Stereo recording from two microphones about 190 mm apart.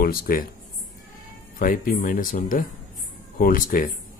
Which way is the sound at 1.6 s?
45° left (ahead or behind).